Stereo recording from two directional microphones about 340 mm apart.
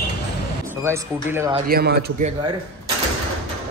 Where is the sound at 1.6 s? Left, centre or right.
Right.